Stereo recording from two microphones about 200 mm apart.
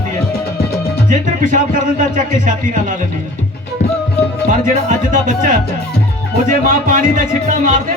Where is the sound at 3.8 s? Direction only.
35° left (ahead or behind).